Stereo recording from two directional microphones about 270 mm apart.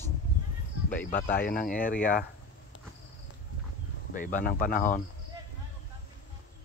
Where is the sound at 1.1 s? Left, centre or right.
Left.